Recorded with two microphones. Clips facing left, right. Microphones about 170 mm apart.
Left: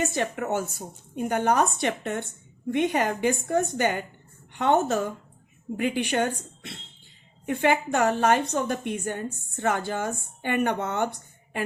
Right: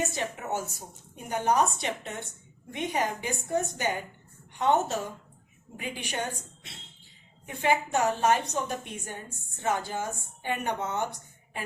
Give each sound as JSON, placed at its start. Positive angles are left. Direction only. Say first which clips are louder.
{"t": 0.1, "sound": "a woman's voice", "louder": "left 5 dB", "side_deg": 60}